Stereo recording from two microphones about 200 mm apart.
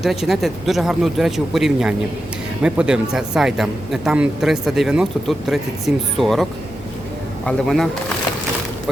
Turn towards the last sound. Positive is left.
turn(degrees=0)  # may be behind; listen again after turning